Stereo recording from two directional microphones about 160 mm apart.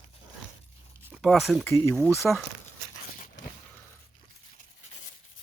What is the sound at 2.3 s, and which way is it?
Speech, centre (ahead or behind).